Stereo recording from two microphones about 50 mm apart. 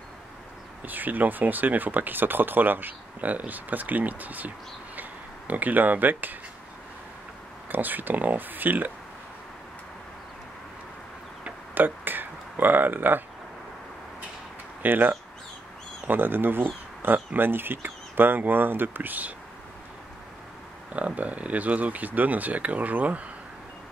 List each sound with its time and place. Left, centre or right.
0.8 s speech: right
5.5 s speech: right
7.6 s speech: right
11.7 s a sound: right
14.8 s speech: right
20.9 s speech: right